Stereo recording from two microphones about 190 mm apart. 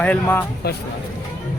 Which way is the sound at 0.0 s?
10° left (ahead or behind).